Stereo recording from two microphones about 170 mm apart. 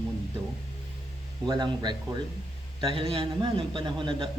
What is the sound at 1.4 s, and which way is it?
A man's voice, 25° right (ahead or behind).